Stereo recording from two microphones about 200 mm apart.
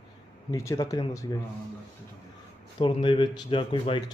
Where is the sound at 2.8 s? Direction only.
25° left (ahead or behind).